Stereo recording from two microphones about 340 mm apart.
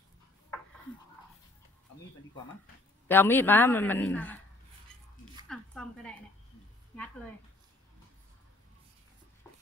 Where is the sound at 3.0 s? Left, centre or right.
Centre.